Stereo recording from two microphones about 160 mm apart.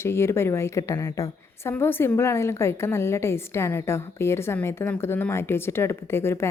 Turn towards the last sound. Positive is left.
turn(degrees=15)  # may be behind; listen again after turning